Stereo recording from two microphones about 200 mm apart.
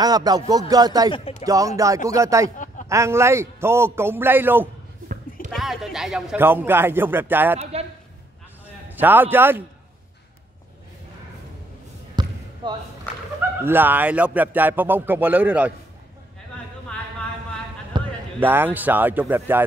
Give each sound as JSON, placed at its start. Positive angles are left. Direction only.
{"t": 0.0, "sound": "speech", "side_deg": -20}
{"t": 5.0, "sound": "a sound", "side_deg": -45}
{"t": 5.5, "sound": "speech", "side_deg": 0}
{"t": 7.7, "sound": "a man's voice", "side_deg": -30}
{"t": 9.0, "sound": "speech", "side_deg": -10}
{"t": 12.2, "sound": "basketball bounce", "side_deg": -20}
{"t": 13.7, "sound": "speech", "side_deg": -10}
{"t": 17.9, "sound": "basketball bounce", "side_deg": -25}
{"t": 18.4, "sound": "speech", "side_deg": -10}